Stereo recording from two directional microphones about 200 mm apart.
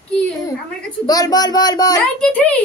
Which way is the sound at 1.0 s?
20° left (ahead or behind).